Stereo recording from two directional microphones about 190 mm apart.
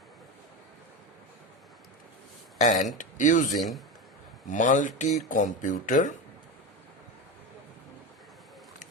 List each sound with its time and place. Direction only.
2.6 s speech: 40° left (ahead or behind)
3.5 s a man's voice: centre (ahead or behind)
4.4 s speech: 40° left (ahead or behind)